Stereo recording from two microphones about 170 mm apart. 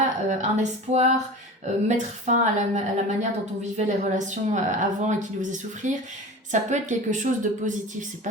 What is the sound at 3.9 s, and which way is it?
A woman's voice, 45° right (ahead or behind).